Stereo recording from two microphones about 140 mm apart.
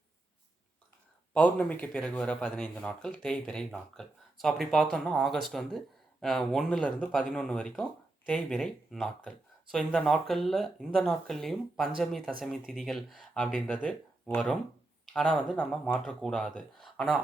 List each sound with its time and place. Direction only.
1.3 s speech: 10° left (ahead or behind)